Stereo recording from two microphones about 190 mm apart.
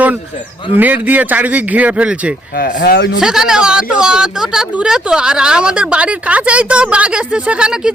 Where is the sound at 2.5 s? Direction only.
55° left (ahead or behind).